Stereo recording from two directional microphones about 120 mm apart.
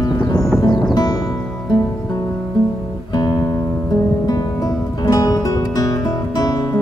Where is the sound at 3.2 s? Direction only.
35° left (ahead or behind).